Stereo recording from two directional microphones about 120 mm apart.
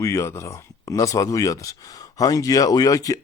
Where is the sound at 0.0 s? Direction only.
25° left (ahead or behind).